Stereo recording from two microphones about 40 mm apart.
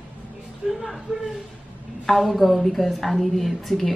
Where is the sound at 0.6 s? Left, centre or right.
Centre.